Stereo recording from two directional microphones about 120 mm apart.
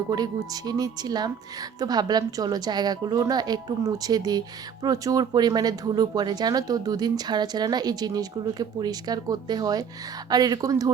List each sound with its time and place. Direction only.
0.1 s a woman's voice: 35° right (ahead or behind)